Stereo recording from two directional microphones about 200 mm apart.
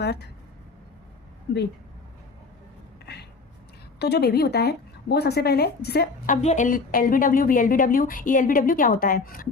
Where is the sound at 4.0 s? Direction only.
55° left (ahead or behind).